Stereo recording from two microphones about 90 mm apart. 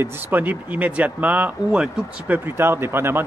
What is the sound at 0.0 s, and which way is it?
A man's voice, 20° right (ahead or behind).